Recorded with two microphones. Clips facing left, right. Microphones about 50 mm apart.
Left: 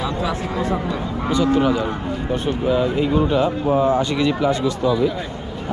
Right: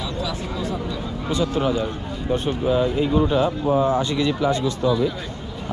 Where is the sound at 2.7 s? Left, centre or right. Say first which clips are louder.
Left 1 dB; left.